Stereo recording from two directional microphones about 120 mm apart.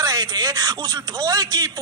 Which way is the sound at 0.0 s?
30° right (ahead or behind).